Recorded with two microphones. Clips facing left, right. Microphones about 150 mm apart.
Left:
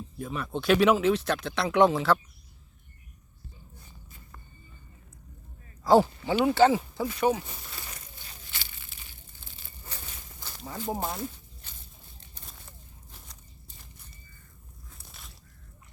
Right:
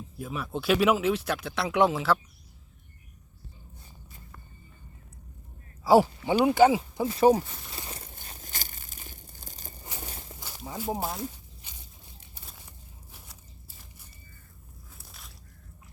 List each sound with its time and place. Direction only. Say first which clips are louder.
0.2 s speech: left 1 dB; 5° right (ahead or behind)
5.8 s speech: right 1 dB; 10° right (ahead or behind)
7.0 s speech: right 7 dB; 30° right (ahead or behind)
7.8 s a sound: right 4 dB; 30° right (ahead or behind)
8.0 s crumpling: right 3 dB; 50° right (ahead or behind)
10.0 s walk: right 6 dB; 40° right (ahead or behind)
10.4 s speech: right 1 dB; 10° right (ahead or behind)
11.6 s a sound: even; 15° right (ahead or behind)